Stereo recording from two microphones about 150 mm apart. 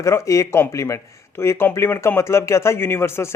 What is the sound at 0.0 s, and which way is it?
Speech, 20° left (ahead or behind).